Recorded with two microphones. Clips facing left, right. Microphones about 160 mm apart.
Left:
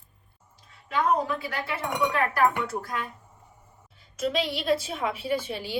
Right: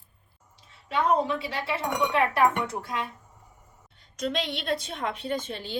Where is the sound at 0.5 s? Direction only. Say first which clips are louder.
Even; 25° right (ahead or behind).